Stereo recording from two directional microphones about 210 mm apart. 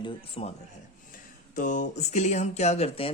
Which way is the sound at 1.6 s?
35° left (ahead or behind).